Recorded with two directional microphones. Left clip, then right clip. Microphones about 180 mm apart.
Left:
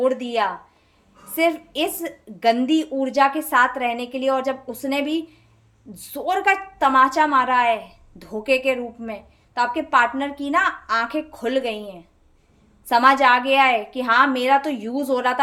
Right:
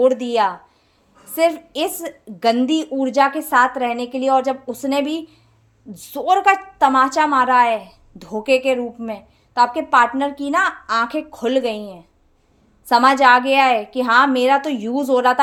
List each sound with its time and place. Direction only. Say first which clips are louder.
0.0 s a woman's voice: right 5 dB; 35° right (ahead or behind)